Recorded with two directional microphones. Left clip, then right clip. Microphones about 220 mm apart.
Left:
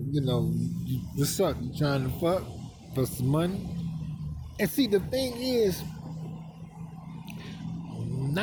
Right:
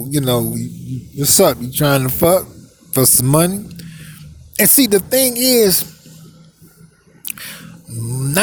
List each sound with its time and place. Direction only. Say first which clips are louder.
0.1 s speech: right 13 dB; 50° right (ahead or behind)
4.5 s speech: right 12 dB; 45° right (ahead or behind)